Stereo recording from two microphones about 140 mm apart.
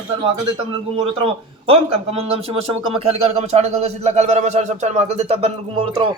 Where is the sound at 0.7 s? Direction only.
40° right (ahead or behind).